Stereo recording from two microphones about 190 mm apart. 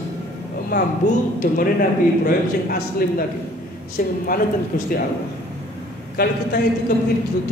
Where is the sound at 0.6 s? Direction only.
45° left (ahead or behind).